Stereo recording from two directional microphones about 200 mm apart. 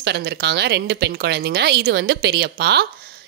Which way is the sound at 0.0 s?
55° right (ahead or behind).